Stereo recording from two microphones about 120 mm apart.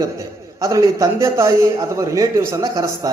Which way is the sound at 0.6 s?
25° right (ahead or behind).